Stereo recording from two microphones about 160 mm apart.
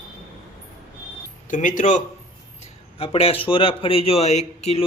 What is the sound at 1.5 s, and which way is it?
Speech, 55° left (ahead or behind).